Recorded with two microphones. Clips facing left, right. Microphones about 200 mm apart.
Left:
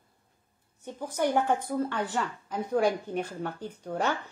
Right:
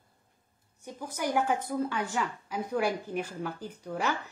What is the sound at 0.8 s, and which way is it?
A woman's voice, 10° right (ahead or behind).